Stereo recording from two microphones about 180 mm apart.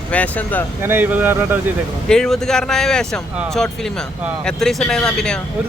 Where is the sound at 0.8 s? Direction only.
10° right (ahead or behind).